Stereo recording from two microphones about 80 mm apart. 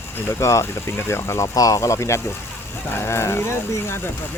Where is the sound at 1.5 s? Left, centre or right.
Left.